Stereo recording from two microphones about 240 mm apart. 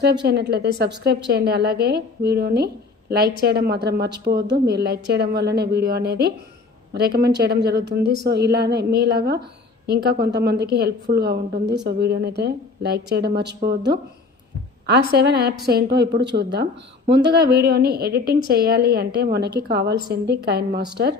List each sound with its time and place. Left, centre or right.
0.0 s a woman's voice: right